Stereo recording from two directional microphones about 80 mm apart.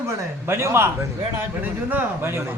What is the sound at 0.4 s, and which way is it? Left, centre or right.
Speech, right.